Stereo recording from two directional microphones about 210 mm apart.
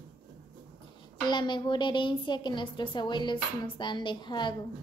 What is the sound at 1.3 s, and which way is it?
A woman's voice, 20° left (ahead or behind).